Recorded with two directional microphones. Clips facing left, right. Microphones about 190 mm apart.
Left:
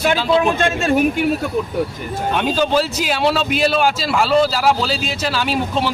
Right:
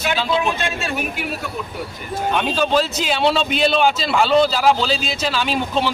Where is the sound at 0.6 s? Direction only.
50° left (ahead or behind).